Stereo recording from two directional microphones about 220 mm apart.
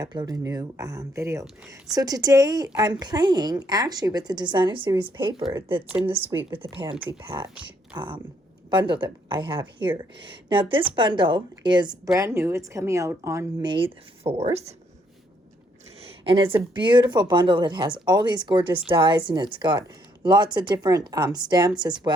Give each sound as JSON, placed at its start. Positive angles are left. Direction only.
{"t": 0.0, "sound": "a woman's voice", "side_deg": -20}
{"t": 5.5, "sound": "a woman's voice", "side_deg": -10}
{"t": 6.7, "sound": "a woman's voice", "side_deg": -20}
{"t": 16.2, "sound": "speech", "side_deg": -25}